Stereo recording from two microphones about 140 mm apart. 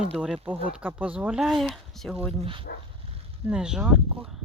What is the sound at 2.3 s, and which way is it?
Speech, 40° right (ahead or behind).